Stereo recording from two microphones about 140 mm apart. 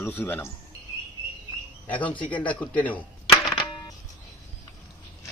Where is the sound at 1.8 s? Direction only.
10° left (ahead or behind).